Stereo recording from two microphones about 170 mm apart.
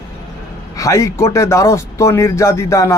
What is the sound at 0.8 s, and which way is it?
Speech, 20° left (ahead or behind).